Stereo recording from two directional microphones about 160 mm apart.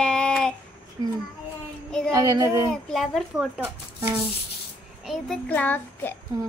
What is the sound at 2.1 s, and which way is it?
Child singing, 20° right (ahead or behind).